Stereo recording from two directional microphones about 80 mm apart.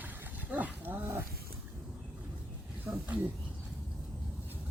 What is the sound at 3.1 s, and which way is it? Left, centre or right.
Speech, centre.